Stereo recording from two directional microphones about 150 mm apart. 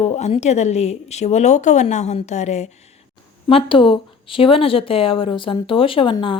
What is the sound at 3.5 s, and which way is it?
Speech, 35° left (ahead or behind).